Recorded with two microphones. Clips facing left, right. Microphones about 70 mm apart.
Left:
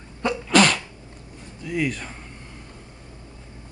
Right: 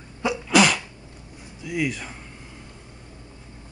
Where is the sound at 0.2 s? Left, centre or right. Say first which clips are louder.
Left 1 dB; centre.